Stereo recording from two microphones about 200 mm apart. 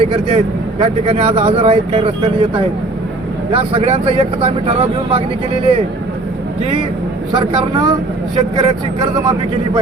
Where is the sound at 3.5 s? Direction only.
25° right (ahead or behind).